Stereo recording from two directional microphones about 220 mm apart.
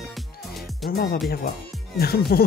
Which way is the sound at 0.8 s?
45° left (ahead or behind).